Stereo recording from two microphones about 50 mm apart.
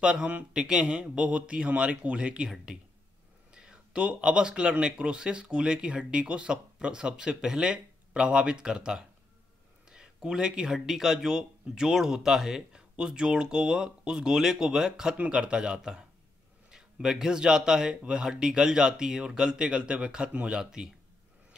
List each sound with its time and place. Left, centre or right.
0.0 s speech: right
3.5 s speech: centre